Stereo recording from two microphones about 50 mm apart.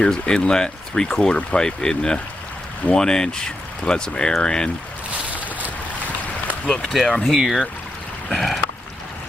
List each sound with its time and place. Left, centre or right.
0.0 s speech: centre
6.7 s speech: centre
7.2 s speech: centre